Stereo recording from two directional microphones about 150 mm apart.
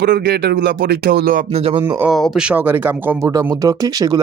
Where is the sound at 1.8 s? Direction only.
15° right (ahead or behind).